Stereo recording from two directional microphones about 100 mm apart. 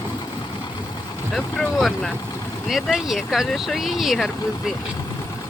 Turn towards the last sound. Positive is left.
turn(degrees=0)  # may be behind; listen again after turning